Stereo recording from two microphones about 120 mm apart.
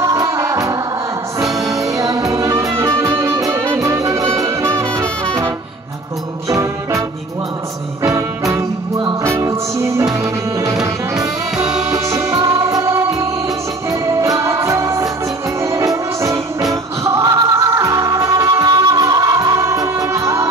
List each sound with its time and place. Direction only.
0.0 s music: 30° right (ahead or behind)
1.4 s music: centre (ahead or behind)
1.8 s music: 30° right (ahead or behind)
6.5 s music: 25° right (ahead or behind)
8.0 s music: 25° right (ahead or behind)
11.5 s music: 5° right (ahead or behind)
11.9 s music: 25° right (ahead or behind)